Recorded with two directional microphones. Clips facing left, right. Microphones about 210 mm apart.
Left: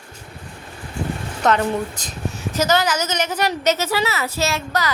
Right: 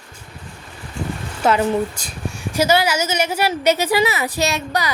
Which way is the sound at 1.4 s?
10° right (ahead or behind).